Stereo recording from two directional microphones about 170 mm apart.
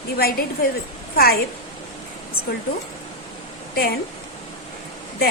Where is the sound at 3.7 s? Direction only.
65° left (ahead or behind).